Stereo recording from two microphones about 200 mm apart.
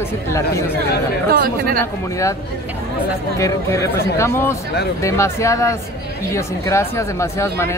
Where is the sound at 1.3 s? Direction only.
45° right (ahead or behind).